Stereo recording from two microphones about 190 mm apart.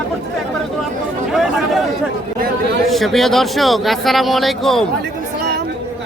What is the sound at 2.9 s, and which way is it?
Speech, centre (ahead or behind).